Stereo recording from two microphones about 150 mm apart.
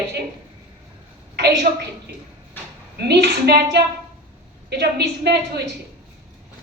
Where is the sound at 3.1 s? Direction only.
90° right.